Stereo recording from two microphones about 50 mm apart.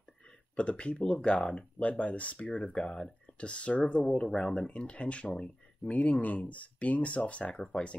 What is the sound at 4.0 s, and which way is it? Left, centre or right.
Speech, centre.